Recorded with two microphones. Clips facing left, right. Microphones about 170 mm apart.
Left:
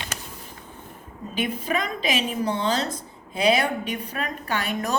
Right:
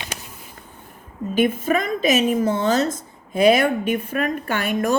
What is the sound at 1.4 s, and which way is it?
A woman's voice, 45° right (ahead or behind).